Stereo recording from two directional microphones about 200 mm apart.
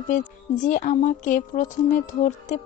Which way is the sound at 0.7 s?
40° left (ahead or behind).